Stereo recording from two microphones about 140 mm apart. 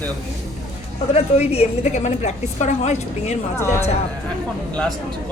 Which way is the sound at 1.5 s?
50° left (ahead or behind).